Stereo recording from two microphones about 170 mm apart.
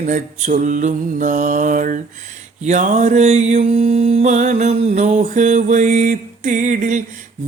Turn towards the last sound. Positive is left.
turn(degrees=-45)  # may be behind; listen again after turning